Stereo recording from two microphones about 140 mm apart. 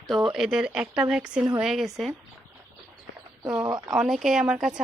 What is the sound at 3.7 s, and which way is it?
Speech, 30° right (ahead or behind).